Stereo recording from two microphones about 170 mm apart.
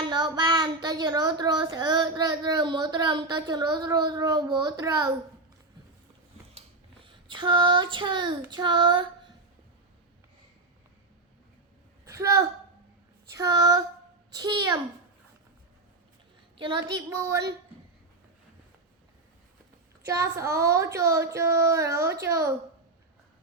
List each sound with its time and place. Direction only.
0.0 s speech: 25° right (ahead or behind)
7.0 s speech: 30° right (ahead or behind)
12.0 s a woman's voice: 15° right (ahead or behind)
16.6 s a woman's voice: 30° right (ahead or behind)
17.1 s a woman's voice: 15° right (ahead or behind)
20.1 s a woman's voice: 20° right (ahead or behind)